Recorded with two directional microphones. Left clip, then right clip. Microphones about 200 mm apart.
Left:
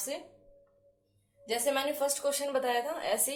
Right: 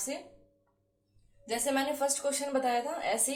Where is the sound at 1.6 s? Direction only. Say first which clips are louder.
Even; 40° left (ahead or behind).